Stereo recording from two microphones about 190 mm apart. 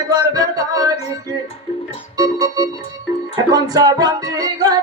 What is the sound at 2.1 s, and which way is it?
Organ, 20° right (ahead or behind).